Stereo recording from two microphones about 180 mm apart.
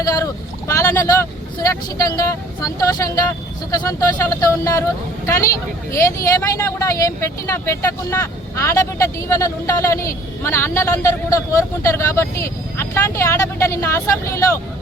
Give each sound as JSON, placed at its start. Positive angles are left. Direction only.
{"t": 0.0, "sound": "speech", "side_deg": 20}